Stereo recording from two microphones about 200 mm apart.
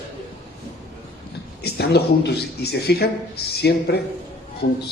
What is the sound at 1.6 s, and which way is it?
Speech, 55° left (ahead or behind).